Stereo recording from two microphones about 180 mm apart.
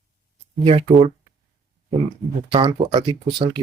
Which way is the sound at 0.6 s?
30° right (ahead or behind).